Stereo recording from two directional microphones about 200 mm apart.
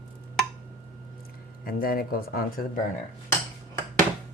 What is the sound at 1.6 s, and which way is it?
Speech, 45° left (ahead or behind).